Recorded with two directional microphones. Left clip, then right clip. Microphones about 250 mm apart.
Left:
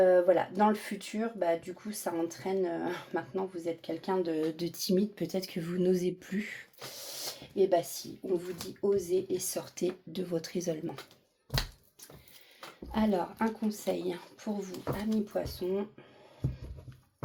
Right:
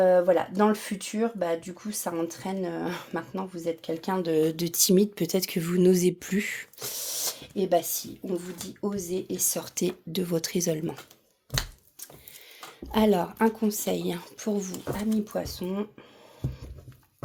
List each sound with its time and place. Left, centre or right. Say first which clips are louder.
0.0 s speech: right 3 dB; right
12.9 s speech: right 7 dB; right